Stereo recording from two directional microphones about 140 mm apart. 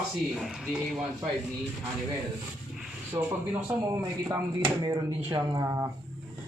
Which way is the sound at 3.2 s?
20° right (ahead or behind).